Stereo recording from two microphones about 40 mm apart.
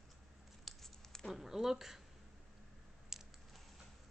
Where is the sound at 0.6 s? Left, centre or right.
Centre.